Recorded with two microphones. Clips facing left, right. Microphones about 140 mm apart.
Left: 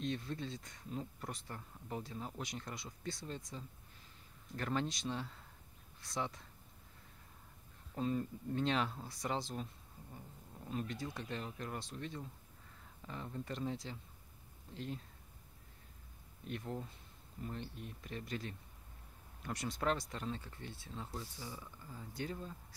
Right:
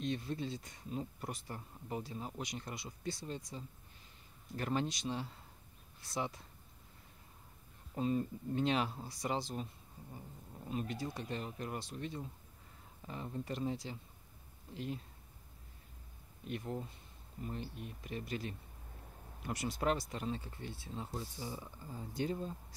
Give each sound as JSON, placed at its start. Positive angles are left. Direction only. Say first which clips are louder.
{"t": 0.0, "sound": "speech", "louder": "right 2 dB", "side_deg": -5}
{"t": 7.9, "sound": "speech", "louder": "right 2 dB", "side_deg": -10}
{"t": 16.4, "sound": "speech", "louder": "right 2 dB", "side_deg": -5}